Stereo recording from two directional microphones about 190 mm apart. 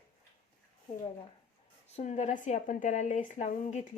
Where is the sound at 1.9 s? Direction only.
35° left (ahead or behind).